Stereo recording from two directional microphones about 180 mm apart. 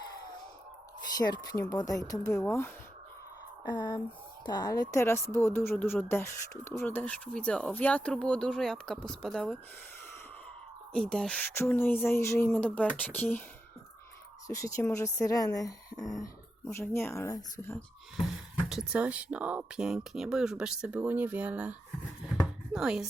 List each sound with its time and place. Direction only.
1.1 s speech: 20° left (ahead or behind)
3.7 s speech: 25° left (ahead or behind); by 9.6 s 5° left (ahead or behind)
10.9 s speech: 5° left (ahead or behind)
14.4 s speech: 15° left (ahead or behind)
18.7 s speech: 5° right (ahead or behind)